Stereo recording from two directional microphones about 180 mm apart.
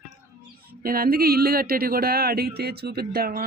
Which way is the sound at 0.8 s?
55° right (ahead or behind).